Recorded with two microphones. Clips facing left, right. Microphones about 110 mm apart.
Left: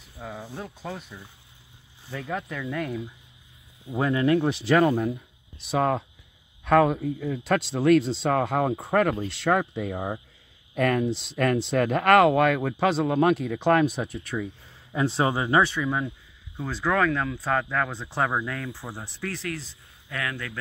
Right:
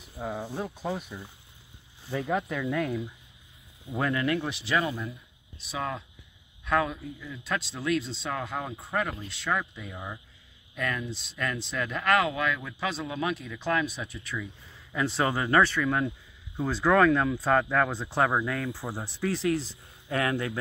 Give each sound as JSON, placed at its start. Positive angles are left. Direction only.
{"t": 0.2, "sound": "speech", "side_deg": -15}
{"t": 4.0, "sound": "speech", "side_deg": 25}
{"t": 4.4, "sound": "speech", "side_deg": 40}
{"t": 11.1, "sound": "speech", "side_deg": 70}
{"t": 14.1, "sound": "speech", "side_deg": 45}
{"t": 14.9, "sound": "speech", "side_deg": 30}
{"t": 16.5, "sound": "speech", "side_deg": -5}
{"t": 20.1, "sound": "speech", "side_deg": -30}